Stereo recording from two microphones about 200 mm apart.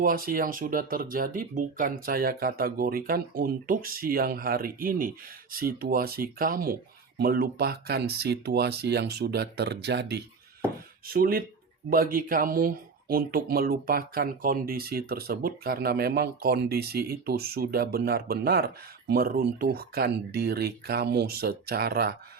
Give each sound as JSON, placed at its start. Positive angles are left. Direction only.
{"t": 0.0, "sound": "speech", "side_deg": -45}
{"t": 11.0, "sound": "speech", "side_deg": -50}